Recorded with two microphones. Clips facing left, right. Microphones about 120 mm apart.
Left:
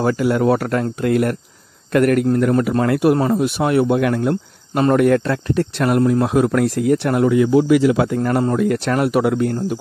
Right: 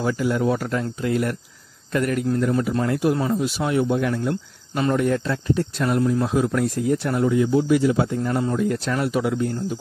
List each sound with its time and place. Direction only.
0.0 s speech: 60° left (ahead or behind)
4.9 s speech: 65° left (ahead or behind)